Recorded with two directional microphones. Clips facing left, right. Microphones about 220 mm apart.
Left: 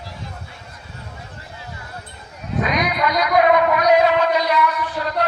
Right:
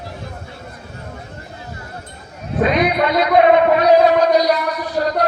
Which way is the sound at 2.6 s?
30° right (ahead or behind).